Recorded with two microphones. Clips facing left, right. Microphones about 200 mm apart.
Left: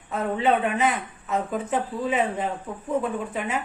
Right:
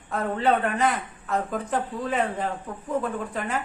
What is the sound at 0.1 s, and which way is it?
A woman's voice, 5° left (ahead or behind).